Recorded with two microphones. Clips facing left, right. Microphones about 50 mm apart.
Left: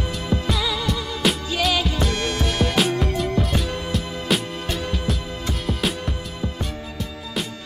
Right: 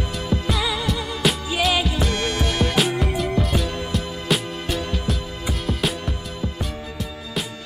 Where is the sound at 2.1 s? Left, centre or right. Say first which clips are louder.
Even; right.